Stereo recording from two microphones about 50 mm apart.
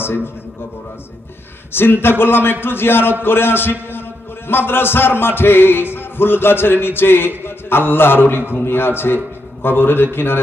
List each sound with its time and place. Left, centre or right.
1.7 s a man's voice: left